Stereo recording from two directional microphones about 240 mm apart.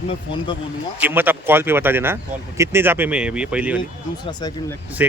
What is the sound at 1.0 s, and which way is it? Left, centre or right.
Speech, centre.